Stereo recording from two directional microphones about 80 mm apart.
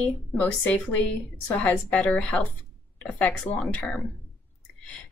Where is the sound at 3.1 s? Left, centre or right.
Centre.